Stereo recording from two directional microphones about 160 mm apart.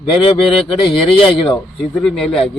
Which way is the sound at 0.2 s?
35° left (ahead or behind).